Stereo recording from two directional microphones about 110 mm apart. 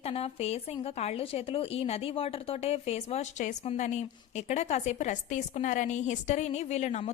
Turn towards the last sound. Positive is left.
turn(degrees=90)